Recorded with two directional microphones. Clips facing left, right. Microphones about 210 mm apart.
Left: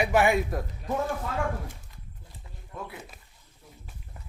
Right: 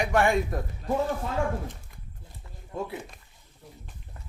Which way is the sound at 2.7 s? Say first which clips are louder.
Right 6 dB; 30° right (ahead or behind).